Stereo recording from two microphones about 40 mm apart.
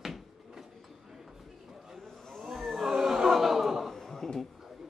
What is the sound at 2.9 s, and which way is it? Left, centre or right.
Chuckle, centre.